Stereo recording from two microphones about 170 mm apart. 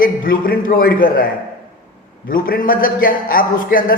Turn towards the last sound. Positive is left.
turn(degrees=55)  # may be behind; listen again after turning